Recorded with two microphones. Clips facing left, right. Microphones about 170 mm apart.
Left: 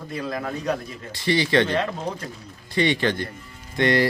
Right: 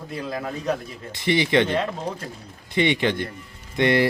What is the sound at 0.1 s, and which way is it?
Speech, 5° right (ahead or behind).